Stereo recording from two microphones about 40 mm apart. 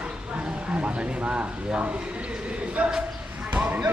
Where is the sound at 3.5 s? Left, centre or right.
Right.